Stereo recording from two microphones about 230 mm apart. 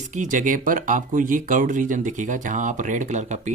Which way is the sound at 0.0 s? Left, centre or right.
Right.